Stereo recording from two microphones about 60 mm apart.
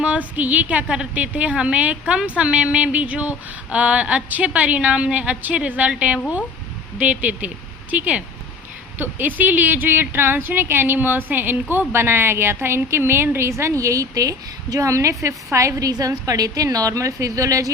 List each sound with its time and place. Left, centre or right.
0.0 s a woman's voice: right